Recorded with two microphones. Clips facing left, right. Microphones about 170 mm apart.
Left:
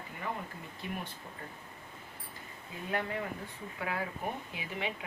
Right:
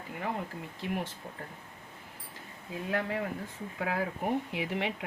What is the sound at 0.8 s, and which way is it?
Speech, 90° right.